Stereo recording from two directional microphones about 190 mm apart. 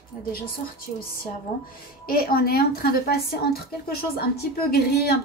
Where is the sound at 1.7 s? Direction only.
50° left (ahead or behind).